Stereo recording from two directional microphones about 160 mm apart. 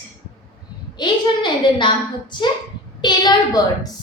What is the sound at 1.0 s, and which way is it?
A woman's voice, 25° left (ahead or behind).